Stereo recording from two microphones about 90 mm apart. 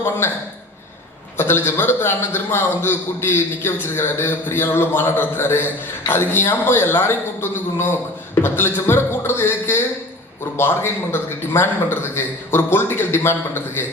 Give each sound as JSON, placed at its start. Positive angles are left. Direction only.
{"t": 0.2, "sound": "a man's voice", "side_deg": 25}